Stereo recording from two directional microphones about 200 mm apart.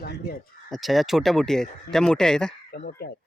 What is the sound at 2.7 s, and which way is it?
Speech, 50° left (ahead or behind).